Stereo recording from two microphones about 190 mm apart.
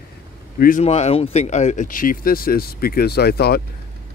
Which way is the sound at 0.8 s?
35° left (ahead or behind).